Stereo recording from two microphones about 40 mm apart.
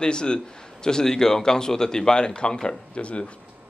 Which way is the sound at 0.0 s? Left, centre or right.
Left.